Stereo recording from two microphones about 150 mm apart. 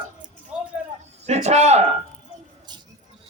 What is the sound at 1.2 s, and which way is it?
Speech, 50° right (ahead or behind).